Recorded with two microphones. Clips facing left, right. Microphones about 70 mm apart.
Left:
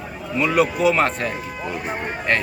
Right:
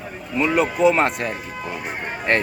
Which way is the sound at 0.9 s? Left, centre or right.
Centre.